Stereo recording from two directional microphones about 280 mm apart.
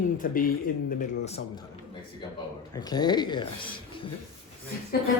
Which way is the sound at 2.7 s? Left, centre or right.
Centre.